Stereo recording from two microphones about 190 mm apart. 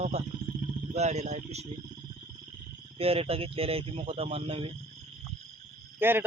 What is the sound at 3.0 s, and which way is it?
Speech, 30° right (ahead or behind).